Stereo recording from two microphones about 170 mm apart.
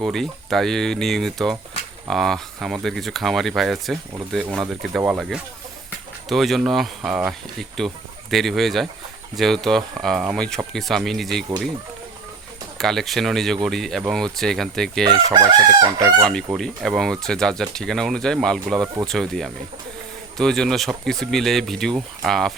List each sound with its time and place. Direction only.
0.0 s speech: centre (ahead or behind)
12.8 s speech: centre (ahead or behind)
15.3 s chicken: 20° right (ahead or behind)
16.6 s speech: centre (ahead or behind)